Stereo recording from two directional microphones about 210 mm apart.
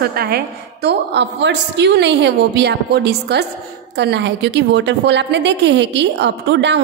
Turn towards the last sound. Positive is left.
turn(degrees=-55)  # may be behind; listen again after turning